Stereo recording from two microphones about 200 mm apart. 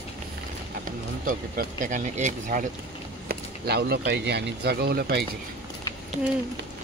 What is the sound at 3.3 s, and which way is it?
Speech, 55° right (ahead or behind).